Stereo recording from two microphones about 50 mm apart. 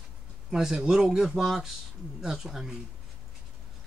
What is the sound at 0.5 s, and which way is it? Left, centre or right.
Speech, centre.